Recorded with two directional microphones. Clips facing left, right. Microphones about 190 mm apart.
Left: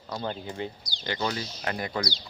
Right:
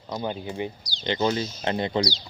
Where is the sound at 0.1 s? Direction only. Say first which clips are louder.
Right 3 dB; 15° right (ahead or behind).